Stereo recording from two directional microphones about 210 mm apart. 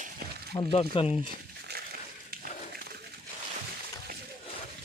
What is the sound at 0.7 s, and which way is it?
Speech, 25° left (ahead or behind).